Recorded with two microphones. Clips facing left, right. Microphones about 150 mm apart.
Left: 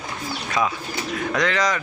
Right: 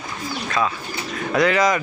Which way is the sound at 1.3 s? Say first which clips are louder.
Right 5 dB; 10° right (ahead or behind).